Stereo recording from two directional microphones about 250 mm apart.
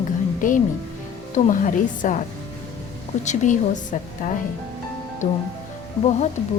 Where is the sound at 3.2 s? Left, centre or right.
Left.